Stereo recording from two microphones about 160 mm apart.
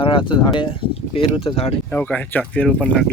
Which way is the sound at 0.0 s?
30° left (ahead or behind).